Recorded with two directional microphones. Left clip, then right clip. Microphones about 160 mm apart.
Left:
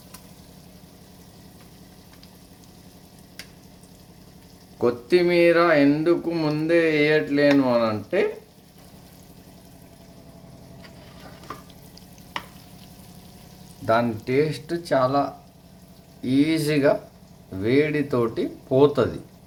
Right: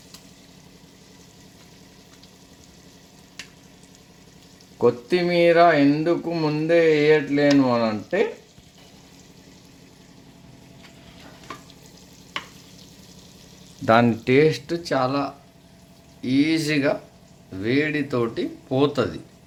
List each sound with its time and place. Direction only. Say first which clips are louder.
4.8 s speech: even; 30° right (ahead or behind)
13.8 s speech: right 4 dB; 45° right (ahead or behind)
14.7 s speech: left 2 dB; 5° right (ahead or behind)
16.2 s speech: even; 10° left (ahead or behind)